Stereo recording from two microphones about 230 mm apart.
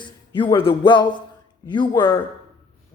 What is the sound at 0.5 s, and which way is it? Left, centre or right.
A woman's voice, left.